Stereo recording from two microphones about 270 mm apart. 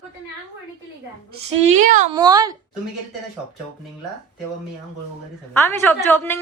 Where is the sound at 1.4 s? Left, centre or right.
Right.